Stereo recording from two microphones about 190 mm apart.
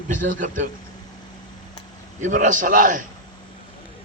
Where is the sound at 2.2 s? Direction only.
40° right (ahead or behind).